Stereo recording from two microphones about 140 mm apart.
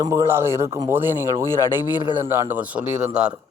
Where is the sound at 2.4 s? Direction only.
10° right (ahead or behind).